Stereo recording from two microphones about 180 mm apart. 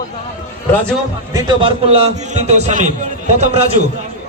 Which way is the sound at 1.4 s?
25° right (ahead or behind).